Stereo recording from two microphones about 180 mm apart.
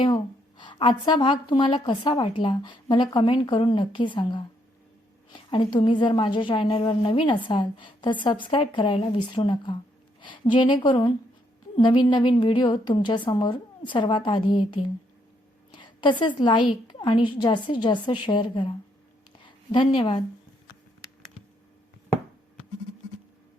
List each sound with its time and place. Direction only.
0.0 s a woman's voice: 25° left (ahead or behind)